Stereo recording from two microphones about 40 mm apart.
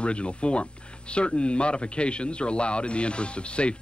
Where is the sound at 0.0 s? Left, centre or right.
Left.